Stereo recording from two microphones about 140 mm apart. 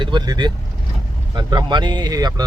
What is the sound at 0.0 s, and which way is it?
Speech, 30° right (ahead or behind).